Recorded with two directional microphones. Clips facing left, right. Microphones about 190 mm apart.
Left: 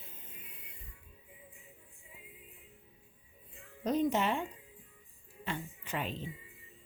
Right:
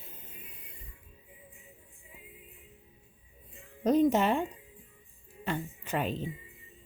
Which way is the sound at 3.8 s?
45° right (ahead or behind).